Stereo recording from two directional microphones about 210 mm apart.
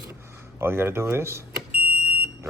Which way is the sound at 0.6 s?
10° right (ahead or behind).